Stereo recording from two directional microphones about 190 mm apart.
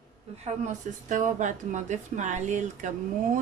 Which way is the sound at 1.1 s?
40° right (ahead or behind).